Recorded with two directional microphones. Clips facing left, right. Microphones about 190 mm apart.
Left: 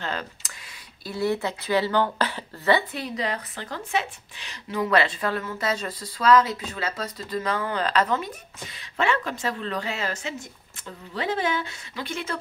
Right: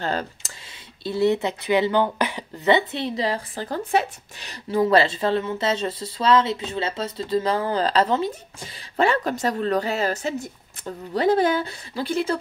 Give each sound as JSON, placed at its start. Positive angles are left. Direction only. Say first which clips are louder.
{"t": 0.0, "sound": "speech", "louder": "right 5 dB", "side_deg": -35}
{"t": 1.0, "sound": "a woman's voice", "louder": "right 5 dB", "side_deg": -25}